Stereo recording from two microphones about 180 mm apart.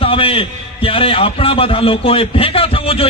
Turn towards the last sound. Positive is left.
turn(degrees=30)  # may be behind; listen again after turning